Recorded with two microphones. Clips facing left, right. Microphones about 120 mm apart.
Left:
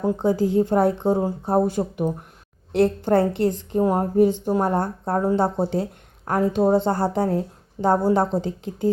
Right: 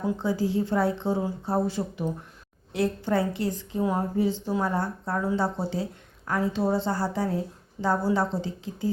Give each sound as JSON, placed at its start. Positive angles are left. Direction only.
{"t": 0.0, "sound": "a woman's voice", "side_deg": 50}